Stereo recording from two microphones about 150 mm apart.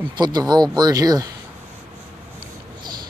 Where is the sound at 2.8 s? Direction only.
30° right (ahead or behind).